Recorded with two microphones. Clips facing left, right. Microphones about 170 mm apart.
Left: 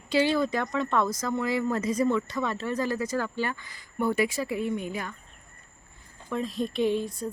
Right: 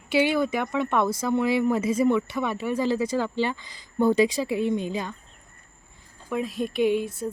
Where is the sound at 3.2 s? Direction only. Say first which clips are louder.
Right 4 dB; 25° right (ahead or behind).